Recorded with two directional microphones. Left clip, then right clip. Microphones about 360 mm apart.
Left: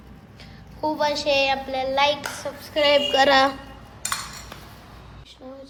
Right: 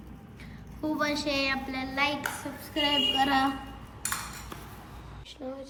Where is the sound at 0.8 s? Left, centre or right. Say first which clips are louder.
Left 7 dB; centre.